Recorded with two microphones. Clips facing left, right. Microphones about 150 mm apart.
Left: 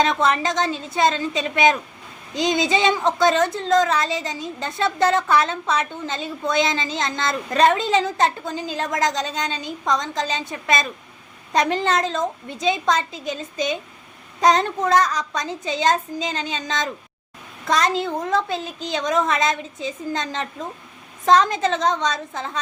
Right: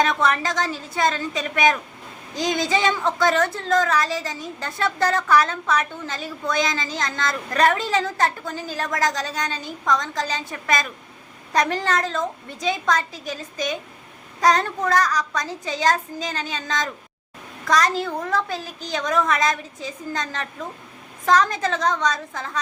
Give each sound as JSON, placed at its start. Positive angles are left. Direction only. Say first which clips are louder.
{"t": 0.0, "sound": "a woman's voice", "louder": "left 1 dB", "side_deg": 20}